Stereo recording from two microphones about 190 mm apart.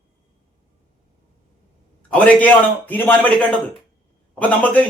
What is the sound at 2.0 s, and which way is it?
A man's voice, 5° left (ahead or behind).